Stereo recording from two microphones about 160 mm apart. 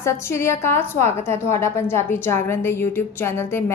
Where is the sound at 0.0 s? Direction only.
15° left (ahead or behind).